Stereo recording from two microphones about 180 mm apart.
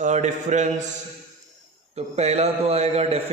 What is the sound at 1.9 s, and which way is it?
A man's voice, 35° right (ahead or behind).